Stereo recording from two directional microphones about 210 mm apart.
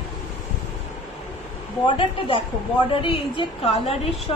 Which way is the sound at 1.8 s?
25° left (ahead or behind).